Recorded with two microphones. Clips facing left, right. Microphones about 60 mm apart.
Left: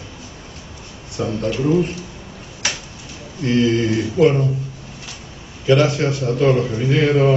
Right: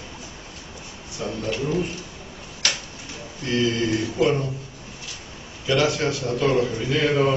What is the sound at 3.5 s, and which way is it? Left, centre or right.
Mantra, left.